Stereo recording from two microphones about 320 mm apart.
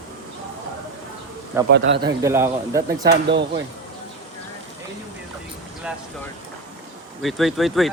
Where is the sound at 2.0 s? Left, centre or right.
Centre.